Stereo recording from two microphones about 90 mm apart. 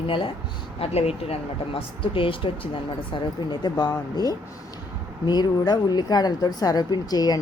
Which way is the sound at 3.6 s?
50° left (ahead or behind).